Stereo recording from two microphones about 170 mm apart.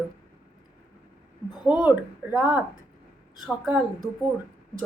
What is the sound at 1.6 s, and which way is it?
Speech, 5° right (ahead or behind).